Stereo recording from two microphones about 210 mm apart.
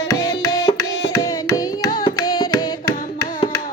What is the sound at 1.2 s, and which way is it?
Carnatic music, 15° left (ahead or behind).